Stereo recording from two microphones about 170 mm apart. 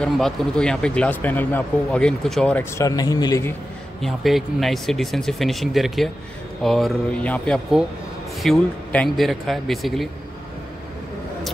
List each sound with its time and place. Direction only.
0.0 s speech: 5° left (ahead or behind)
2.8 s speech: 20° left (ahead or behind)
4.0 s speech: centre (ahead or behind)